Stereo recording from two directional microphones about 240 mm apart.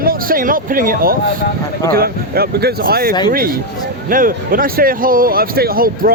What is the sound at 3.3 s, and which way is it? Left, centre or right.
Speech, right.